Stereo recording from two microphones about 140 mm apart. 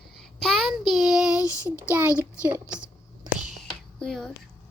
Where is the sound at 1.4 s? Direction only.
25° left (ahead or behind).